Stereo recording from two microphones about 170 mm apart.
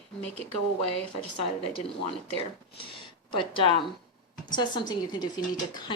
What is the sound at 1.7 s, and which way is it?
A woman's voice, 35° left (ahead or behind).